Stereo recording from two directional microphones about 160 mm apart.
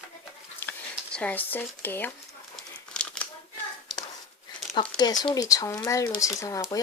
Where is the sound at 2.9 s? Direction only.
5° left (ahead or behind).